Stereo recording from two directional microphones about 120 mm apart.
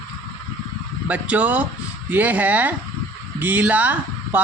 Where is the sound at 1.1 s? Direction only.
10° right (ahead or behind).